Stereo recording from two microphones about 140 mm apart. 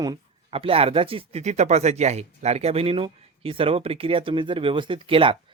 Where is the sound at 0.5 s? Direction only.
45° right (ahead or behind).